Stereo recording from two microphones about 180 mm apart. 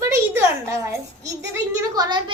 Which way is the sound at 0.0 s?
15° right (ahead or behind).